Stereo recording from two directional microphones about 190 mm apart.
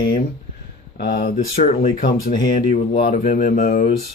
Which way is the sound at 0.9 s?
50° left (ahead or behind).